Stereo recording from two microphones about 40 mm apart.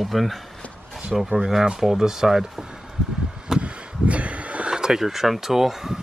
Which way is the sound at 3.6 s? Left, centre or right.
Right.